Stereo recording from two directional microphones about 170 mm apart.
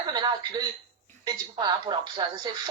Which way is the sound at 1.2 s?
25° right (ahead or behind).